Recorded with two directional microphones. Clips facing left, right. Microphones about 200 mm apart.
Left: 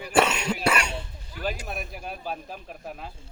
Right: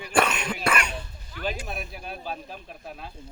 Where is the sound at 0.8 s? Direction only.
25° left (ahead or behind).